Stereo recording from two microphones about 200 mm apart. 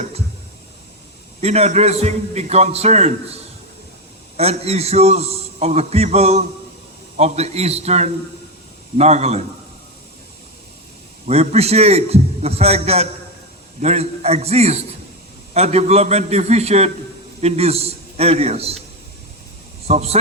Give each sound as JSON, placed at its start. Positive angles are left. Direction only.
{"t": 1.4, "sound": "a man's voice", "side_deg": -30}
{"t": 4.4, "sound": "a man's voice", "side_deg": -30}
{"t": 11.3, "sound": "a man's voice", "side_deg": -30}
{"t": 19.8, "sound": "speech", "side_deg": -30}